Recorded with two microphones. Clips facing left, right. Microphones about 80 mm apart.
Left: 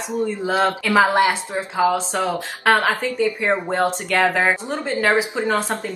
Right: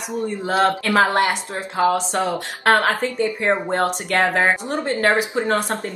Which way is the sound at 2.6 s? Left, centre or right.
Centre.